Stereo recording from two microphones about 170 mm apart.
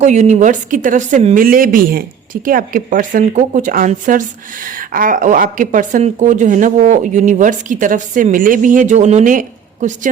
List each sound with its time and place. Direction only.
0.0 s a woman's voice: 45° right (ahead or behind)